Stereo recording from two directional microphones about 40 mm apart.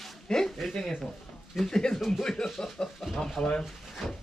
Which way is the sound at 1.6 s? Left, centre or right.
Centre.